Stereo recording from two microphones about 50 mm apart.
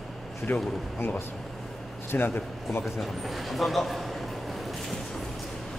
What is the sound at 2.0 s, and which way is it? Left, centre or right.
Speech, left.